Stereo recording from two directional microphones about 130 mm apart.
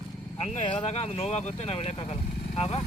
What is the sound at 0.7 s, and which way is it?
Speech, 50° left (ahead or behind).